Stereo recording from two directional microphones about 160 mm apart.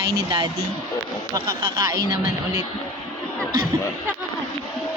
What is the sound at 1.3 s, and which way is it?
Speech, 25° right (ahead or behind).